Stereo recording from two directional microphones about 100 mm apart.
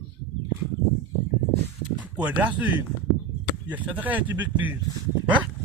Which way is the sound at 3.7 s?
15° right (ahead or behind).